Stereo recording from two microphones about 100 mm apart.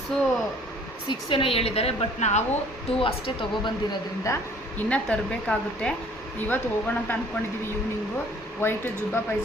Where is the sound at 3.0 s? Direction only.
65° left (ahead or behind).